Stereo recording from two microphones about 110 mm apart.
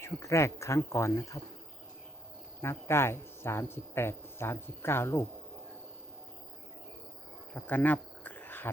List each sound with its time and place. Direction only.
0.0 s speech: 25° left (ahead or behind)
2.6 s speech: 25° left (ahead or behind)
7.5 s a sound: 15° left (ahead or behind)